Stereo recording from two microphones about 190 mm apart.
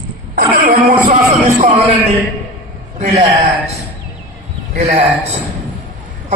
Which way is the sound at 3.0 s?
40° right (ahead or behind).